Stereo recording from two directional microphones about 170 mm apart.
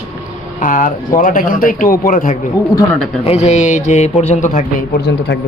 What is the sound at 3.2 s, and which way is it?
Speech, 40° left (ahead or behind).